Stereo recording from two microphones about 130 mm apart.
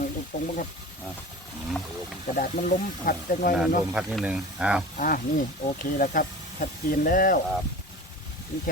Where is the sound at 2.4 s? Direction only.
90° left.